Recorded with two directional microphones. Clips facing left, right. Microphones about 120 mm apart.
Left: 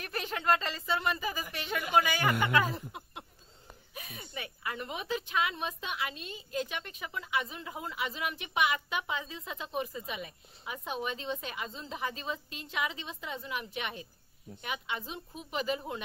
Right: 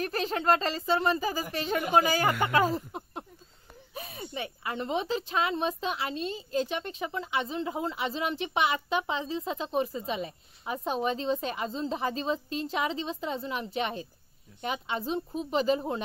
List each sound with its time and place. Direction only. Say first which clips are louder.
0.0 s speech: right 6 dB; 35° right (ahead or behind)